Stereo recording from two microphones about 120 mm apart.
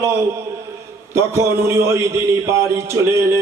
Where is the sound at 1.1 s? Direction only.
25° right (ahead or behind).